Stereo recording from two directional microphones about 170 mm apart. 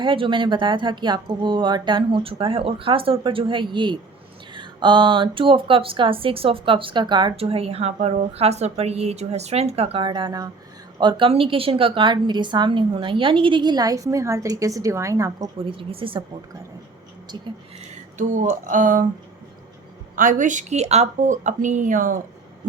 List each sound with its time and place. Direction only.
0.0 s a woman's voice: 30° right (ahead or behind)
15.6 s speech: 30° right (ahead or behind)
18.2 s speech: 45° right (ahead or behind)
20.1 s speech: 50° right (ahead or behind)